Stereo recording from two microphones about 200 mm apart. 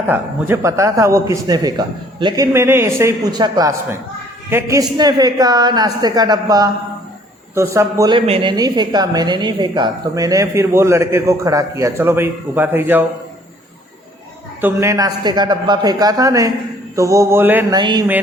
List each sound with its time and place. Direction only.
0.1 s a woman's voice: 10° right (ahead or behind)
14.6 s a woman's voice: 15° right (ahead or behind)
17.7 s a woman's voice: 20° right (ahead or behind)